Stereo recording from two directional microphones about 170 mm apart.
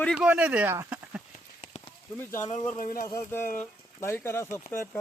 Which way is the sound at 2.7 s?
55° left (ahead or behind).